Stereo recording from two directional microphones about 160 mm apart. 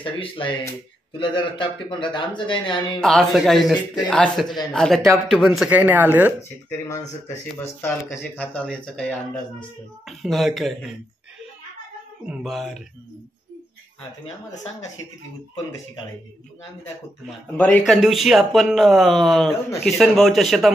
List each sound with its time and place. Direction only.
0.0 s speech: 30° left (ahead or behind)
3.0 s speech: 5° left (ahead or behind)
7.5 s speech: 15° left (ahead or behind)
10.0 s speech: centre (ahead or behind)
12.3 s speech: centre (ahead or behind)
17.6 s speech: 5° left (ahead or behind)